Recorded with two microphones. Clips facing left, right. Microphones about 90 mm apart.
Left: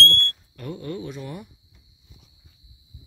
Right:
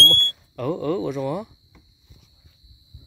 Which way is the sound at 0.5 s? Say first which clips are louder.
Right 11 dB; 90° right.